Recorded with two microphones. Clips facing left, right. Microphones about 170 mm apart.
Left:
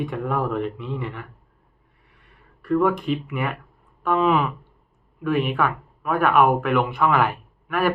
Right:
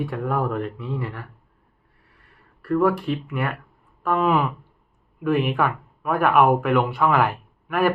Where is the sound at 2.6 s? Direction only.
5° right (ahead or behind).